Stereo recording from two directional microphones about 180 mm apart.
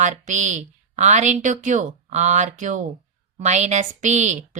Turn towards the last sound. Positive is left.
turn(degrees=-40)  # may be behind; listen again after turning